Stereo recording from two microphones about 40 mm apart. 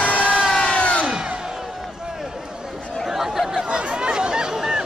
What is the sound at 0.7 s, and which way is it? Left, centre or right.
Crowd, left.